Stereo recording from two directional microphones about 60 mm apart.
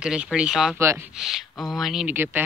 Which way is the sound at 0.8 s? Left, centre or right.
Right.